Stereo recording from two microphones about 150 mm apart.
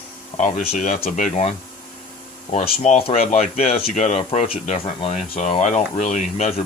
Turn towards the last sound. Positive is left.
turn(degrees=55)  # may be behind; listen again after turning